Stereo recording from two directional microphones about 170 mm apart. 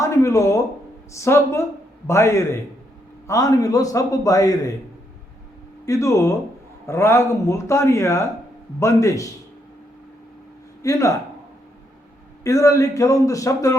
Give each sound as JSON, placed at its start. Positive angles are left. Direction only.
{"t": 0.0, "sound": "a sound", "side_deg": 20}
{"t": 1.1, "sound": "a man's voice", "side_deg": 15}
{"t": 5.8, "sound": "a man's voice", "side_deg": 20}
{"t": 10.8, "sound": "a man's voice", "side_deg": 20}
{"t": 12.4, "sound": "a man's voice", "side_deg": 20}